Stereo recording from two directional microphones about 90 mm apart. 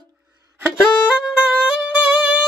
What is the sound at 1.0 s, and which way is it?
Music, 10° right (ahead or behind).